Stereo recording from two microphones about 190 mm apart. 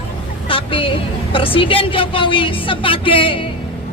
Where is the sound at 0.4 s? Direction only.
30° left (ahead or behind).